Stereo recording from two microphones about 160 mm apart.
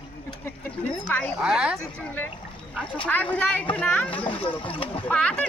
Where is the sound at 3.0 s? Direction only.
10° left (ahead or behind).